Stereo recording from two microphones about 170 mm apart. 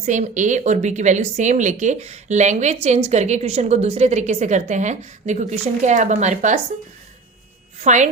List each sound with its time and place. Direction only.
0.0 s a woman's voice: 45° right (ahead or behind)
7.8 s a woman's voice: 45° right (ahead or behind)